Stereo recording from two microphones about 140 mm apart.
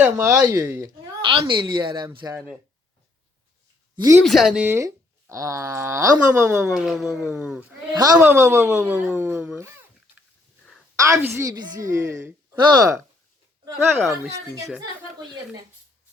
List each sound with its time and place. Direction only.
0.0 s speech: 15° right (ahead or behind)
1.2 s speech: 35° right (ahead or behind)
2.0 s speech: 20° right (ahead or behind)
3.9 s speech: 25° right (ahead or behind)
4.2 s speech: centre (ahead or behind)
4.6 s speech: 20° right (ahead or behind)
6.6 s speech: 5° right (ahead or behind)
7.9 s speech: 30° right (ahead or behind)
10.9 s speech: 20° right (ahead or behind)
11.5 s speech: 30° right (ahead or behind)
14.3 s speech: 25° right (ahead or behind)